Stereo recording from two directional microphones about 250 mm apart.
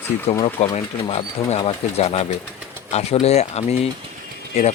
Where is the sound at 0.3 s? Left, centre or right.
Centre.